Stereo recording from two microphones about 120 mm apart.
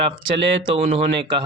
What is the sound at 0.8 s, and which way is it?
Speech, 55° right (ahead or behind).